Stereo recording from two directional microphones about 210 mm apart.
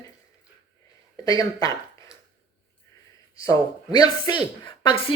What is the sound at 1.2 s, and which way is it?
Speech, 15° left (ahead or behind).